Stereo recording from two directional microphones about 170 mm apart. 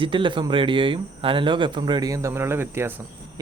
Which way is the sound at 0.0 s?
30° right (ahead or behind).